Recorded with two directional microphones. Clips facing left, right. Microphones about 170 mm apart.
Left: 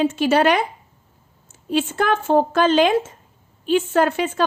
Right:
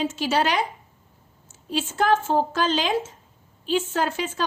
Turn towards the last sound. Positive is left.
turn(degrees=60)  # may be behind; listen again after turning